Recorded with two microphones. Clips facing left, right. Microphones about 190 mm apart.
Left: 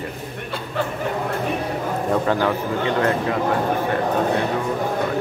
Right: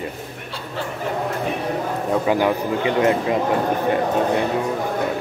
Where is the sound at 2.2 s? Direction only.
15° right (ahead or behind).